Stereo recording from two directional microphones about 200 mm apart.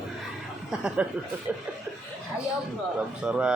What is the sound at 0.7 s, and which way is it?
Speech, 5° right (ahead or behind).